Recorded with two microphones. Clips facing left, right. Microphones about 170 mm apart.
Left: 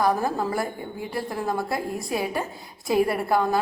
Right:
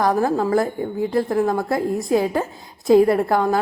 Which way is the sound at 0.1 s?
20° right (ahead or behind).